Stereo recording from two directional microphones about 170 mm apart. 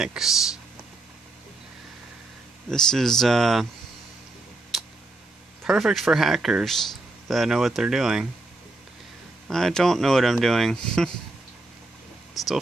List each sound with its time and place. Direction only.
0.0 s speech: 5° right (ahead or behind)
2.7 s speech: 5° left (ahead or behind)
4.7 s tick: centre (ahead or behind)
5.6 s speech: 5° right (ahead or behind)
9.5 s speech: 5° left (ahead or behind)
12.4 s speech: centre (ahead or behind)